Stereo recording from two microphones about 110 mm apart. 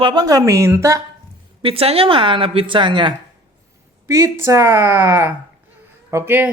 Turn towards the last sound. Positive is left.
turn(degrees=-20)  # may be behind; listen again after turning